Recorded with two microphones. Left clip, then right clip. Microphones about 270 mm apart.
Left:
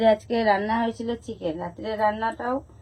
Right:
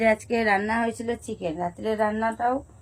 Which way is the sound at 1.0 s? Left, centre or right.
Right.